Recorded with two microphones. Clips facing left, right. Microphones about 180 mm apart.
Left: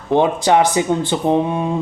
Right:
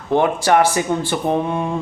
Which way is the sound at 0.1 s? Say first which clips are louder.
Left 1 dB; 20° left (ahead or behind).